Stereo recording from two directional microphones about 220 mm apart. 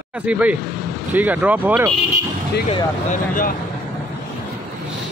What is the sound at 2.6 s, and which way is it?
Speech, 30° left (ahead or behind).